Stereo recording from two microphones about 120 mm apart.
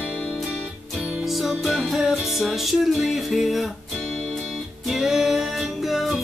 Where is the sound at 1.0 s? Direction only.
10° right (ahead or behind).